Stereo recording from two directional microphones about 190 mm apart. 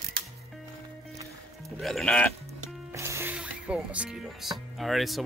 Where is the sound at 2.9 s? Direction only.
15° right (ahead or behind).